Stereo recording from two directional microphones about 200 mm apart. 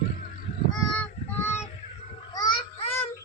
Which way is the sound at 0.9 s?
10° left (ahead or behind).